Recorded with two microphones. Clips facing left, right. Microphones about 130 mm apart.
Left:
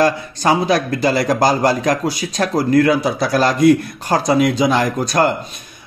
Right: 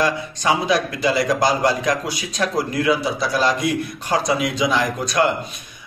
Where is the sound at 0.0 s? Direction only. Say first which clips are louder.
Left 5 dB; 45° left (ahead or behind).